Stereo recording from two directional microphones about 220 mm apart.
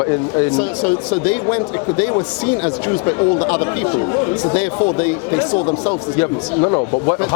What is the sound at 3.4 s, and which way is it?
Speech, 25° left (ahead or behind).